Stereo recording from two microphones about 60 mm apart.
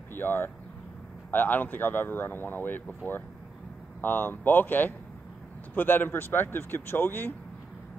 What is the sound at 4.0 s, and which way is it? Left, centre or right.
Speech, left.